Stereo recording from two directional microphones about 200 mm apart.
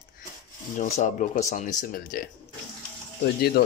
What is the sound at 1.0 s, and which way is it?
Speech, 40° left (ahead or behind).